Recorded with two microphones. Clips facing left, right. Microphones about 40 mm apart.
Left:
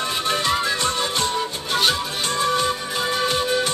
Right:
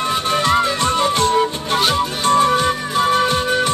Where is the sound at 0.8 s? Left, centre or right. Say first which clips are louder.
Right 6 dB; right.